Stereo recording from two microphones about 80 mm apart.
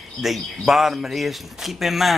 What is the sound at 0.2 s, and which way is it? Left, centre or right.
Speech, centre.